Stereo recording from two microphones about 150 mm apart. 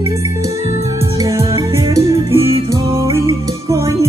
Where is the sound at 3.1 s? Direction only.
20° right (ahead or behind).